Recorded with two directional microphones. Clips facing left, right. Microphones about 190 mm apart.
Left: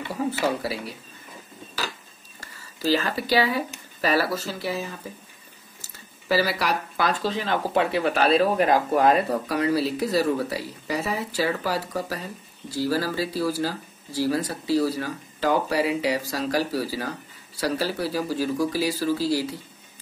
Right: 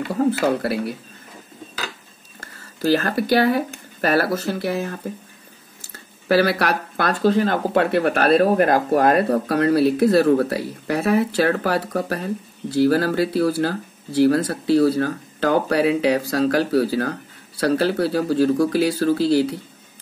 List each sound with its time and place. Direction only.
0.1 s speech: 60° right (ahead or behind)
2.8 s speech: 55° right (ahead or behind)
7.7 s speech: 60° right (ahead or behind)